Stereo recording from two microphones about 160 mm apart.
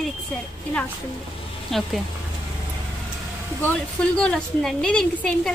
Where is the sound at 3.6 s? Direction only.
5° left (ahead or behind).